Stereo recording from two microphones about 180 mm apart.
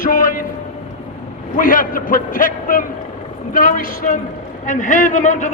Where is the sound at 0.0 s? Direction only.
50° left (ahead or behind).